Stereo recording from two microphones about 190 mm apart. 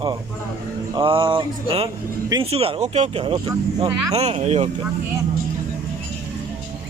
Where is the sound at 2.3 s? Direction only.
30° right (ahead or behind).